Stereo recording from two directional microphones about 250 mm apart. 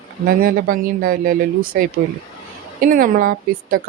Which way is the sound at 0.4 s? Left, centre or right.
Right.